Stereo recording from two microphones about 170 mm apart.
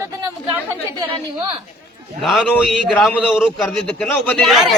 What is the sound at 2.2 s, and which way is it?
A man's voice, centre (ahead or behind).